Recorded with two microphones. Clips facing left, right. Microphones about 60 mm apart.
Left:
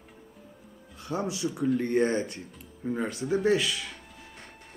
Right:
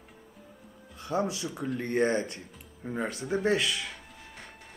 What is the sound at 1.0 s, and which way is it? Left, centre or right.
Speech, right.